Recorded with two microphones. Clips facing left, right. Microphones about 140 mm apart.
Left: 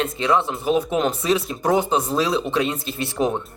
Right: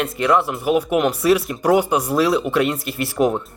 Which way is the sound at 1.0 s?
25° left (ahead or behind).